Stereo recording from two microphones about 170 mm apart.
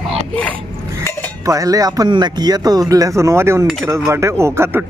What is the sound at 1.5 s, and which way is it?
Speech, 20° right (ahead or behind).